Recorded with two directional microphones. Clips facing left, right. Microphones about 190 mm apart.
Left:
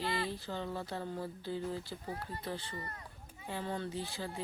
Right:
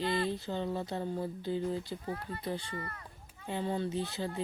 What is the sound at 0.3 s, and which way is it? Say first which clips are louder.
A child's voice: right 5 dB; 20° right (ahead or behind).